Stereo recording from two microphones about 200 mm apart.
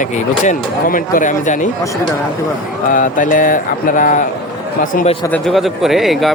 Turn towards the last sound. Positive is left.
turn(degrees=0)  # may be behind; listen again after turning